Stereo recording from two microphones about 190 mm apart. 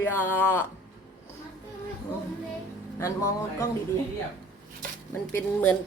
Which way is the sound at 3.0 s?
15° left (ahead or behind).